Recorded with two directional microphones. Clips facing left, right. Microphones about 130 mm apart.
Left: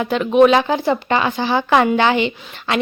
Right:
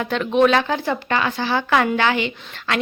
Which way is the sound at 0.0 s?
10° left (ahead or behind).